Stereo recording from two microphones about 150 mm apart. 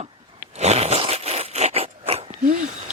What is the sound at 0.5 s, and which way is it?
Zipper, 45° right (ahead or behind).